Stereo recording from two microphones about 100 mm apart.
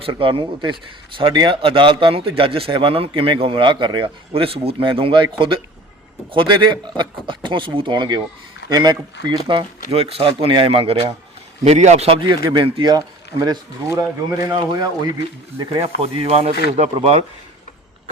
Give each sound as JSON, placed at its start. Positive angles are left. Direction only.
{"t": 0.0, "sound": "speech", "side_deg": -60}
{"t": 4.3, "sound": "a man's voice", "side_deg": -70}
{"t": 11.7, "sound": "a man's voice", "side_deg": -90}
{"t": 12.4, "sound": "a man's voice", "side_deg": -50}
{"t": 12.9, "sound": "speech", "side_deg": -45}
{"t": 14.3, "sound": "speech", "side_deg": -30}
{"t": 14.6, "sound": "a man's voice", "side_deg": -45}
{"t": 15.5, "sound": "speech", "side_deg": -30}
{"t": 16.0, "sound": "speech", "side_deg": -75}